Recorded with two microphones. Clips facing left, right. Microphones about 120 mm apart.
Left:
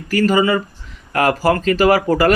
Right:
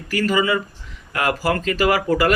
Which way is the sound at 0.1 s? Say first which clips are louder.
Left 4 dB; 45° left (ahead or behind).